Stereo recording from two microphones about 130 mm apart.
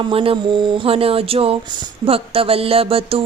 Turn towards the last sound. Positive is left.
turn(degrees=-45)  # may be behind; listen again after turning